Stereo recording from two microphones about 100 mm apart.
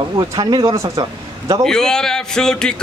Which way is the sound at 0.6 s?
30° right (ahead or behind).